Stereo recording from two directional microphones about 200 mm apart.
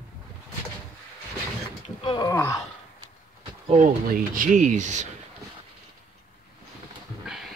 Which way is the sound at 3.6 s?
40° right (ahead or behind).